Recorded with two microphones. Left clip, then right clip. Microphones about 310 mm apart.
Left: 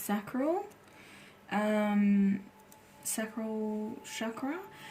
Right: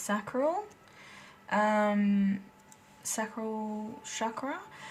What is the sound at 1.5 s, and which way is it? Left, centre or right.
Speech, centre.